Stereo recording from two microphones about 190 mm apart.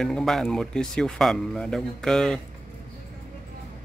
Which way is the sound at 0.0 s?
Centre (ahead or behind).